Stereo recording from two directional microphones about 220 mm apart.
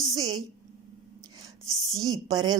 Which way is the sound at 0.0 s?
15° right (ahead or behind).